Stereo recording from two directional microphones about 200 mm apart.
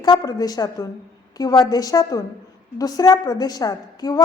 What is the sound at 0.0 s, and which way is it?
A woman's voice, 20° left (ahead or behind).